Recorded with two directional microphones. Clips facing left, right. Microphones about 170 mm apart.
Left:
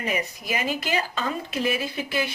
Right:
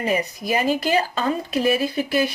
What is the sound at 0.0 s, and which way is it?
Speech, 35° right (ahead or behind).